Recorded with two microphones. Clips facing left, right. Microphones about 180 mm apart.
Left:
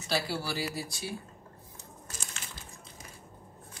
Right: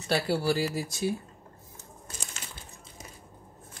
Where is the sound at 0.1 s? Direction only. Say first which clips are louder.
Right 6 dB; 50° right (ahead or behind).